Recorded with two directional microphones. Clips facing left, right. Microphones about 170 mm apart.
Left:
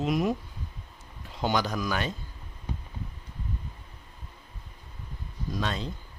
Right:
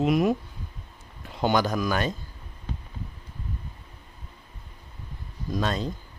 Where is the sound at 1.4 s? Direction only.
55° right (ahead or behind).